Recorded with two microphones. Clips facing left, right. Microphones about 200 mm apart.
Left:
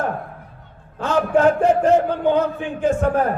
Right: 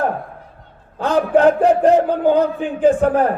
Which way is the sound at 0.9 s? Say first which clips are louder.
Right 3 dB; 35° right (ahead or behind).